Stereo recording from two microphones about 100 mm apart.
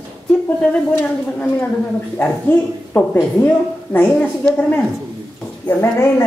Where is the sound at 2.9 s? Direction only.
15° left (ahead or behind).